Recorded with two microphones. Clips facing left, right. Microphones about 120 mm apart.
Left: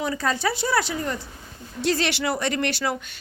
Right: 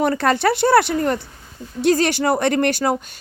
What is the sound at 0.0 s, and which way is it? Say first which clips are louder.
Speech: right 7 dB; 65° right (ahead or behind).